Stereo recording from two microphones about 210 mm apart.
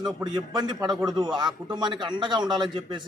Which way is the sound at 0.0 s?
20° right (ahead or behind).